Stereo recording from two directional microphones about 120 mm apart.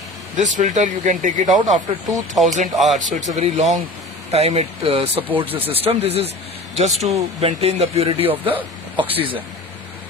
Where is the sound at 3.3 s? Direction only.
65° right (ahead or behind); by 5.2 s 50° right (ahead or behind).